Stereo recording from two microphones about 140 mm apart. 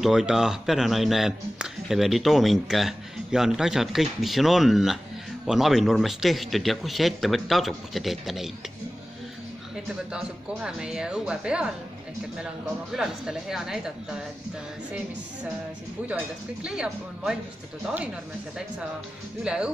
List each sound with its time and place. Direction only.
0.0 s a man's voice: 5° right (ahead or behind)
10.1 s speech: 5° right (ahead or behind)
12.9 s a man's voice: 5° right (ahead or behind)
16.6 s a man's voice: 5° right (ahead or behind)
19.4 s speech: 5° right (ahead or behind)